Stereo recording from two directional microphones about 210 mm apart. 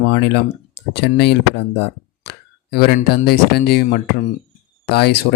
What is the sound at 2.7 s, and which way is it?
Speech, 50° left (ahead or behind).